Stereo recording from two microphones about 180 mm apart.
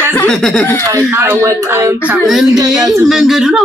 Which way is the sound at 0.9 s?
10° right (ahead or behind).